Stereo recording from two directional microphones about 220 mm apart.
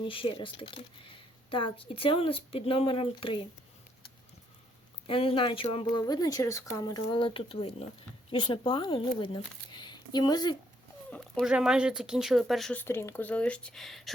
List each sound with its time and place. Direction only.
0.0 s speech: 25° left (ahead or behind)
5.0 s speech: 25° left (ahead or behind)
11.1 s speech: centre (ahead or behind)